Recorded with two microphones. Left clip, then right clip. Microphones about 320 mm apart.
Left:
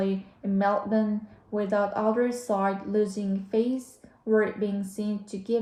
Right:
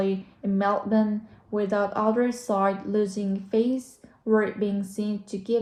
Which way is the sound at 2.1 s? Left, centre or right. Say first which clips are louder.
Right 1 dB; centre.